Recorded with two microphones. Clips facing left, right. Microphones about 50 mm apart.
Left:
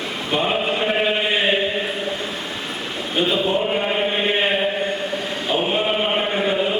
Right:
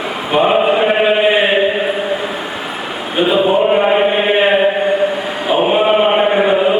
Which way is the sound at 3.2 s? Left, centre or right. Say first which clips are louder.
Right 8 dB; centre.